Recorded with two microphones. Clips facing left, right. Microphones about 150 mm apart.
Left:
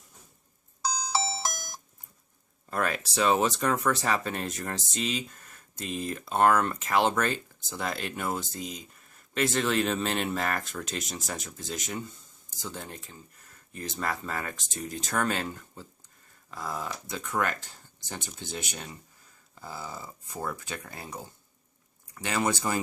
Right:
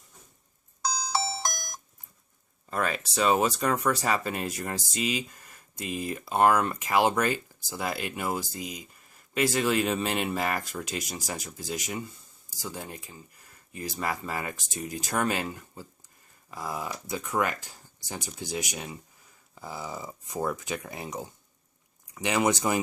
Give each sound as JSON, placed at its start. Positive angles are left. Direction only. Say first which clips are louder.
{"t": 1.3, "sound": "alarm clock", "louder": "even", "side_deg": 5}
{"t": 2.6, "sound": "speech", "louder": "even", "side_deg": 0}